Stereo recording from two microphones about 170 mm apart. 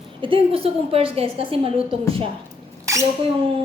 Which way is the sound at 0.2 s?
30° right (ahead or behind).